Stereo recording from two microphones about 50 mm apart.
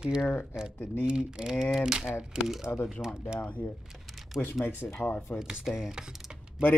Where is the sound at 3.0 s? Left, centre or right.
Left.